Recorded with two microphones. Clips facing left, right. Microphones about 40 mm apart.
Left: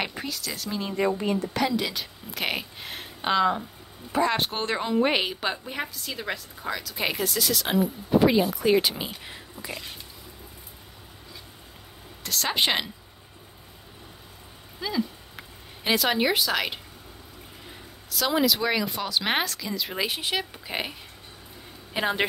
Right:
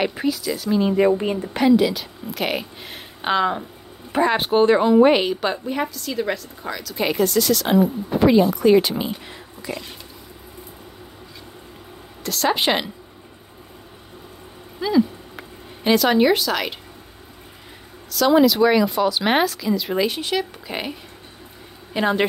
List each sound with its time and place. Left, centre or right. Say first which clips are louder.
0.0 s speech: right 9 dB; centre
1.8 s a woman's voice: right 9 dB; centre
3.2 s a woman's voice: right 3 dB; centre
9.6 s speech: right 7 dB; centre
12.2 s a woman's voice: right 5 dB; centre
14.8 s a sound: right 10 dB; centre
15.9 s a woman's voice: right 7 dB; centre
18.1 s a woman's voice: right 8 dB; centre